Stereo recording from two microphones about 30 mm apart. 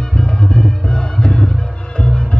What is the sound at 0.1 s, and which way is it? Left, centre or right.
Music, left.